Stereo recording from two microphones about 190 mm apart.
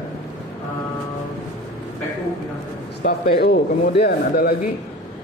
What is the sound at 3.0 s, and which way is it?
Speech, 60° left (ahead or behind).